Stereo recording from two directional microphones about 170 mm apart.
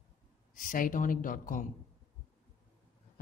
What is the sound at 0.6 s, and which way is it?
Speech, 55° left (ahead or behind).